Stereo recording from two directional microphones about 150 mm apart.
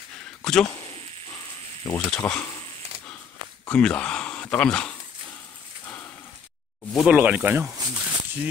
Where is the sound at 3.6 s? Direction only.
10° left (ahead or behind).